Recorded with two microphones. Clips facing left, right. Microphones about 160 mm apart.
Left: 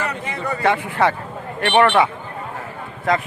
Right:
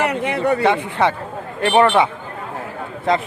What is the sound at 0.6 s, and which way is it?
Speech, 20° right (ahead or behind).